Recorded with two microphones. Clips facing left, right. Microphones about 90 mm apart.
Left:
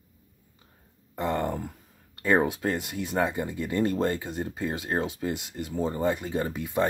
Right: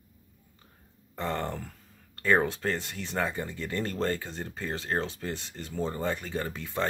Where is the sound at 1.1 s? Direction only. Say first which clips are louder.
Left 4 dB; 15° left (ahead or behind).